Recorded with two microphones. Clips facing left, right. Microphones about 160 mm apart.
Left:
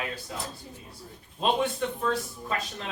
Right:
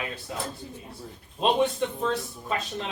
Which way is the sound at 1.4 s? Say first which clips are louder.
Right 3 dB; 20° right (ahead or behind).